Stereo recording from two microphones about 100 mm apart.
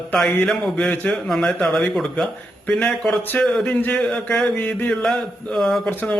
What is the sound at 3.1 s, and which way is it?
Speech, 15° left (ahead or behind).